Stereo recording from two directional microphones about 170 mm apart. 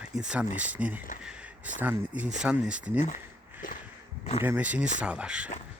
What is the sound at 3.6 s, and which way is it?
Walk, 50° left (ahead or behind).